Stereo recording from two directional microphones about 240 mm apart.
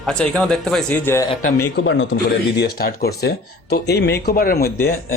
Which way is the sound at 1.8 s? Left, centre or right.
Left.